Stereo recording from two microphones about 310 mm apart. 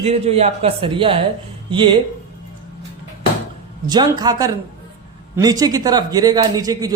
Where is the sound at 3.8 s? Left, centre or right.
Centre.